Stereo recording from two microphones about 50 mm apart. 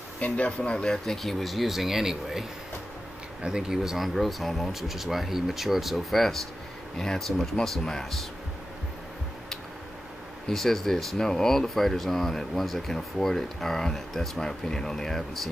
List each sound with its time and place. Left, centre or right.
0.5 s speech: left
0.8 s speech: centre
3.4 s speech: centre
10.5 s speech: centre